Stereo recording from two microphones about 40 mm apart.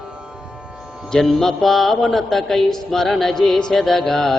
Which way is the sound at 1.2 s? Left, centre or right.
Centre.